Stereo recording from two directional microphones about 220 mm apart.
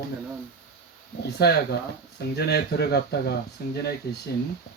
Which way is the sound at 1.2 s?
45° left (ahead or behind).